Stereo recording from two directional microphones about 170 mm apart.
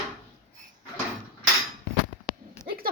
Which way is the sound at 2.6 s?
60° right (ahead or behind).